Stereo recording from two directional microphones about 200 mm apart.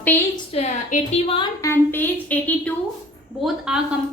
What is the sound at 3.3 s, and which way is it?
Speech, 5° right (ahead or behind).